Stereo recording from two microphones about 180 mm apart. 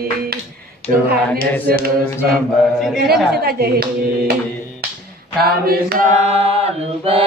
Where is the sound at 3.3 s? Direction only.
60° right (ahead or behind).